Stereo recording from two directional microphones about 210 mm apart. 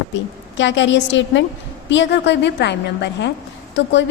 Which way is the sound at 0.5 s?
60° left (ahead or behind).